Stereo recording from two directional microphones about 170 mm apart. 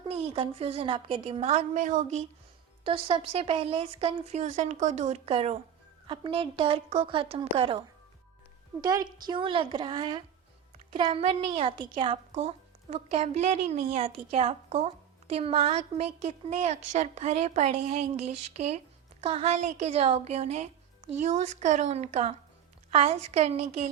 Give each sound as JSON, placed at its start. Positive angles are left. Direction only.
{"t": 0.1, "sound": "a woman's voice", "side_deg": -35}
{"t": 2.8, "sound": "a woman's voice", "side_deg": -30}
{"t": 8.8, "sound": "a woman's voice", "side_deg": -20}